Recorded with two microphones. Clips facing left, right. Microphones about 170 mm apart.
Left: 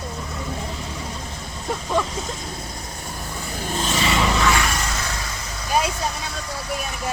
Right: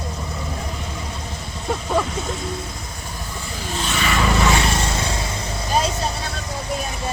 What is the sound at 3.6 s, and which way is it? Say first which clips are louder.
Vehicle: left 1 dB; 45° left (ahead or behind).